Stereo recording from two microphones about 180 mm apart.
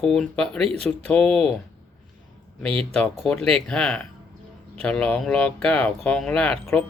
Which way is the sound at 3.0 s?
5° left (ahead or behind).